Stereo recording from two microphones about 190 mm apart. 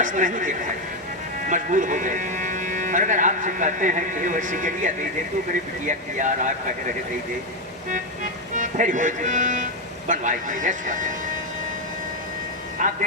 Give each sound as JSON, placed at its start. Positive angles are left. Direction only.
{"t": 0.0, "sound": "speech", "side_deg": -45}
{"t": 5.9, "sound": "speech", "side_deg": -40}
{"t": 7.9, "sound": "speech", "side_deg": -40}
{"t": 12.8, "sound": "vehicle", "side_deg": -40}